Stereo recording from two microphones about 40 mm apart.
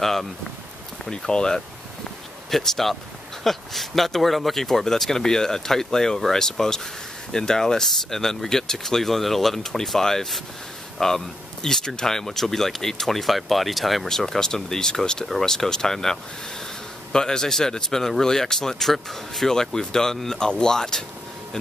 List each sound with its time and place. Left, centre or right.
0.0 s speech: centre
1.1 s speech: centre
2.5 s speech: centre